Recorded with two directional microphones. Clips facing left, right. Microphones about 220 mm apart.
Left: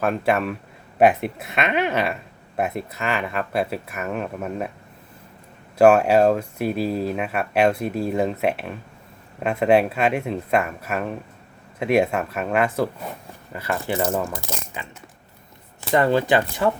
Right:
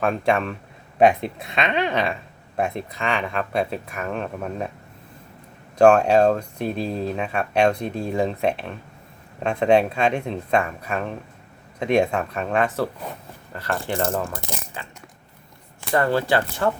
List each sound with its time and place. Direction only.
0.0 s speech: 5° left (ahead or behind)
5.7 s speech: 5° left (ahead or behind)
16.0 s speech: 20° left (ahead or behind)